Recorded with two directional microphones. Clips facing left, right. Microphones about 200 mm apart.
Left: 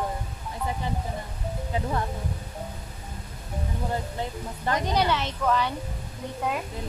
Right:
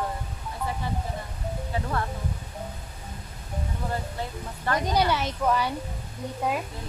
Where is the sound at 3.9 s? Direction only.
20° left (ahead or behind).